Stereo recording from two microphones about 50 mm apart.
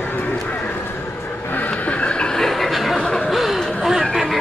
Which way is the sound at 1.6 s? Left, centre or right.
Left.